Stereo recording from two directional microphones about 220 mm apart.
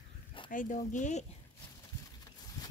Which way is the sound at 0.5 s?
35° left (ahead or behind).